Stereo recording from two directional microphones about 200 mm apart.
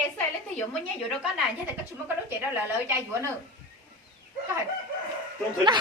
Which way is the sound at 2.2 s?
10° right (ahead or behind).